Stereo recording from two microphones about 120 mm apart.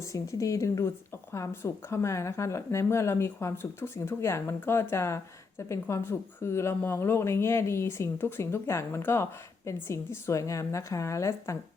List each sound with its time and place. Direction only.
0.0 s a woman's voice: 25° left (ahead or behind)